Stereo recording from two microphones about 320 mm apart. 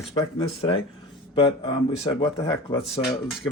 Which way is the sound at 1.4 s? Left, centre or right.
Centre.